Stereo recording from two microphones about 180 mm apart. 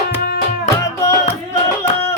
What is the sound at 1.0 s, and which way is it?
Music, 15° left (ahead or behind).